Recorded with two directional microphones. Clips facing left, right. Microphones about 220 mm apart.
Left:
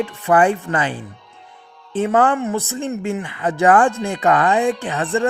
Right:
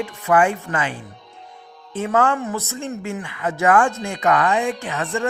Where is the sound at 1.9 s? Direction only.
30° left (ahead or behind).